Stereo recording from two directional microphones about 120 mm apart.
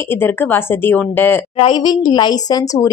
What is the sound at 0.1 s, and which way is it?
Speech, 15° left (ahead or behind).